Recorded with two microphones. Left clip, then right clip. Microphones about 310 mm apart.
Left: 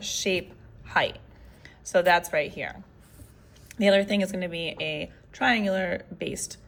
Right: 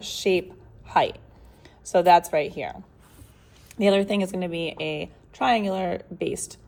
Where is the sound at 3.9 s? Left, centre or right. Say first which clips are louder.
Even; centre.